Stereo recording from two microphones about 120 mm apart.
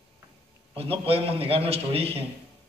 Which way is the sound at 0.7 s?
55° right (ahead or behind).